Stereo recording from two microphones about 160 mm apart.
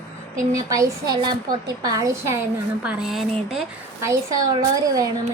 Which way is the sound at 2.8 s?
5° right (ahead or behind).